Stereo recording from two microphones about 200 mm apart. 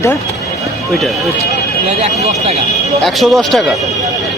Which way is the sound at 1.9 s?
30° right (ahead or behind).